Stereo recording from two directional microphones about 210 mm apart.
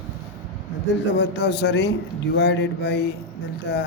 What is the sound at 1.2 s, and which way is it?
Speech, 55° left (ahead or behind).